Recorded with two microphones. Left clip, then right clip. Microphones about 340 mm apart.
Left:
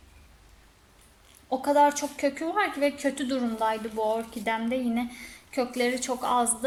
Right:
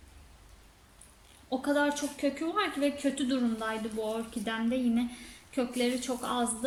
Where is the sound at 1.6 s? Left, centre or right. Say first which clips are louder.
Left 8 dB; centre.